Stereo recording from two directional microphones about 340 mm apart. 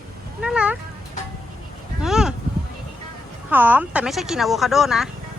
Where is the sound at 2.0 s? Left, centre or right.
Centre.